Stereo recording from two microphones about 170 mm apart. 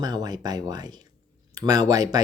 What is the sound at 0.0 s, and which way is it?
Speech, 25° right (ahead or behind).